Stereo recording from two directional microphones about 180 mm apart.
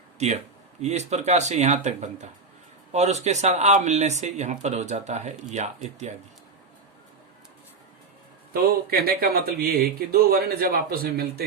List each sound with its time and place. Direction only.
0.2 s speech: 40° right (ahead or behind)
8.5 s speech: 55° right (ahead or behind)